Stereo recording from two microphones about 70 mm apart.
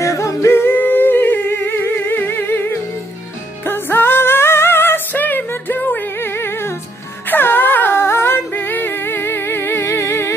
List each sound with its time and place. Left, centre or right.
0.0 s singing: left
3.6 s music: left